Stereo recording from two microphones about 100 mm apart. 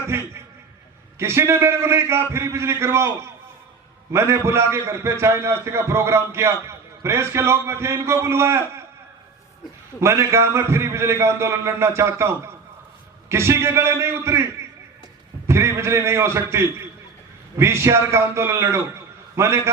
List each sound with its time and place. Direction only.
1.2 s a man's voice: 25° right (ahead or behind)
10.0 s a man's voice: 30° right (ahead or behind)